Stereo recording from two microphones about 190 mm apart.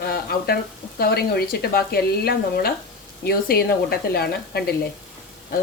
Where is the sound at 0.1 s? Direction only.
55° left (ahead or behind).